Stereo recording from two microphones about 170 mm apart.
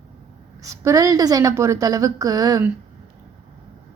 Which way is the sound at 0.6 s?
20° right (ahead or behind).